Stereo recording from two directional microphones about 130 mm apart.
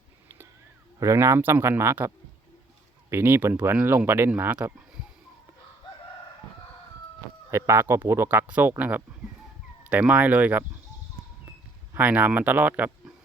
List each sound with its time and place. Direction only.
0.9 s speech: 20° right (ahead or behind)
7.5 s speech: 20° right (ahead or behind)
9.9 s speech: 10° right (ahead or behind)
11.9 s speech: 10° right (ahead or behind)